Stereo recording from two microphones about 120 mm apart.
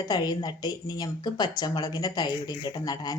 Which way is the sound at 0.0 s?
35° left (ahead or behind).